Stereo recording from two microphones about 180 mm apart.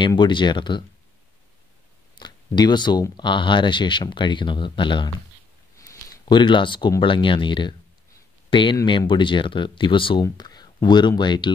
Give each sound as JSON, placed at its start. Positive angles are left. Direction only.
{"t": 0.0, "sound": "speech", "side_deg": 25}
{"t": 2.1, "sound": "speech", "side_deg": 25}